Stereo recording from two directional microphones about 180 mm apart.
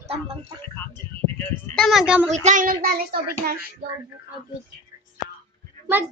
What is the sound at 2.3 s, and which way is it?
Speech, 40° right (ahead or behind).